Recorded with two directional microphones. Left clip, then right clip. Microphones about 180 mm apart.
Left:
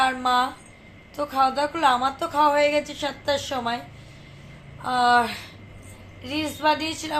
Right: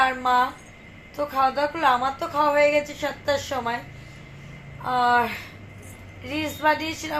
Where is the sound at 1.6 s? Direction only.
10° left (ahead or behind).